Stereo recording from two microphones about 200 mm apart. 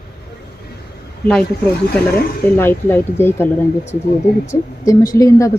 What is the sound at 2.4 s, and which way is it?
Speech, 10° left (ahead or behind).